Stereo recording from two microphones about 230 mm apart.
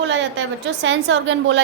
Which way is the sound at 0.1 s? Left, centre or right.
Right.